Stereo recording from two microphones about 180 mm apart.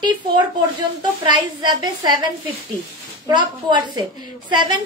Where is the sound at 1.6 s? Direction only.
25° right (ahead or behind).